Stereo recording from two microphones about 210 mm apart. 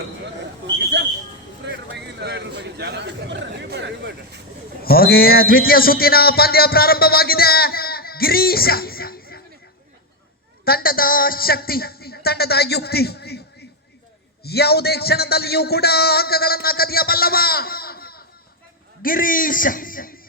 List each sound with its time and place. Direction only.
1.6 s speech: 55° right (ahead or behind)
4.8 s a man's voice: 45° left (ahead or behind)
10.7 s a man's voice: 45° left (ahead or behind)
14.4 s a man's voice: 50° left (ahead or behind)